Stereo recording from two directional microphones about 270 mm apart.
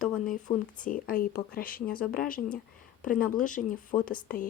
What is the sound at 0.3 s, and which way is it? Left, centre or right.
Speech, left.